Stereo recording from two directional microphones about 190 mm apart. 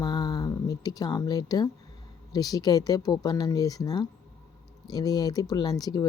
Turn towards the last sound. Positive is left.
turn(degrees=20)  # may be behind; listen again after turning